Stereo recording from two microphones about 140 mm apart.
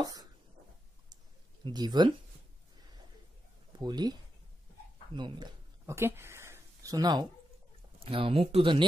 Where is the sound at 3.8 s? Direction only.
30° right (ahead or behind).